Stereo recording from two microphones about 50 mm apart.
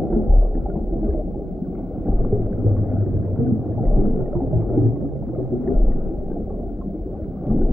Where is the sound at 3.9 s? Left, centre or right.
Centre.